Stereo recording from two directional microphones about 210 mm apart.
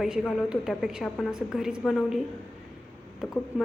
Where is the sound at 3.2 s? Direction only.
Centre (ahead or behind).